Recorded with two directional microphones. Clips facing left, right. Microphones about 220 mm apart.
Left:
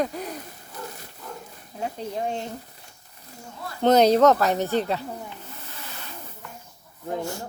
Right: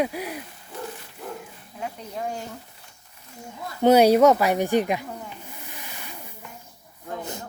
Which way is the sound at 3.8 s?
10° right (ahead or behind).